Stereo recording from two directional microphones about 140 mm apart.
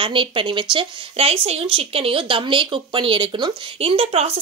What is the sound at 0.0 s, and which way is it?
Speech, 40° right (ahead or behind).